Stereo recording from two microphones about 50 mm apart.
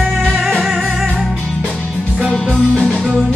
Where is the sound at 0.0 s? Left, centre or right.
Centre.